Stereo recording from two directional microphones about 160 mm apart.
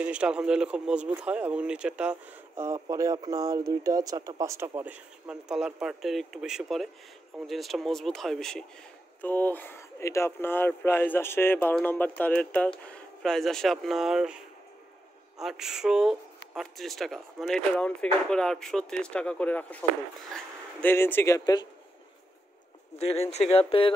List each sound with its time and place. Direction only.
0.0 s speech: 5° right (ahead or behind)
2.6 s speech: 20° right (ahead or behind); by 20.5 s centre (ahead or behind)
20.8 s speech: 15° left (ahead or behind)
22.9 s speech: 40° left (ahead or behind)